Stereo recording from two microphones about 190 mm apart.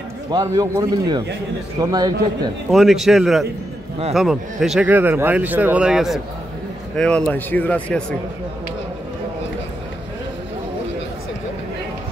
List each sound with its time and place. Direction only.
0.3 s a man's voice: 20° right (ahead or behind)
2.7 s speech: centre (ahead or behind)